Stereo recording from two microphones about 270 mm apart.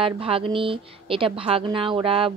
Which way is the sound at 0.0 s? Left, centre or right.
Centre.